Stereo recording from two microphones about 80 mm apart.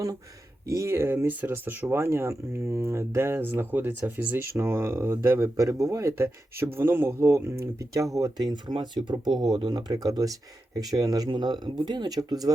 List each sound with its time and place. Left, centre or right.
0.7 s speech: right
0.9 s speech: right
4.4 s speech: right
9.2 s speech: centre
9.6 s speech: right